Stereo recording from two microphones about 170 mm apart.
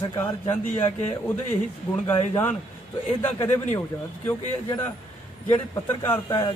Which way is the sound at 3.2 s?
15° left (ahead or behind).